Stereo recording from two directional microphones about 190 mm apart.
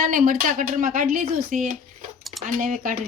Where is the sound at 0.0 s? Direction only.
45° right (ahead or behind).